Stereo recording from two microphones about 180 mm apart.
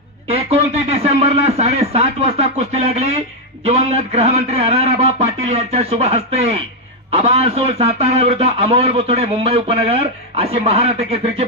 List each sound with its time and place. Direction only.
0.3 s a man's voice: 35° right (ahead or behind)